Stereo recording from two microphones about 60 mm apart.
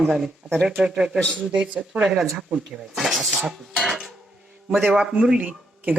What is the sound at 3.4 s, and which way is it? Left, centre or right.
Speech, centre.